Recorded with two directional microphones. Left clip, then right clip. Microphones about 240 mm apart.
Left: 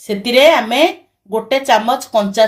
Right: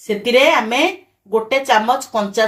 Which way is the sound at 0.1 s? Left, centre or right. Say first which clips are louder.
Left 3 dB; left.